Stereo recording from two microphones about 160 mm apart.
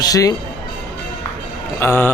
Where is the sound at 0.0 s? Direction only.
20° left (ahead or behind).